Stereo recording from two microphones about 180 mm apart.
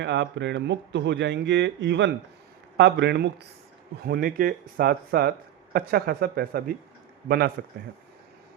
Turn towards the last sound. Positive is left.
turn(degrees=-55)  # may be behind; listen again after turning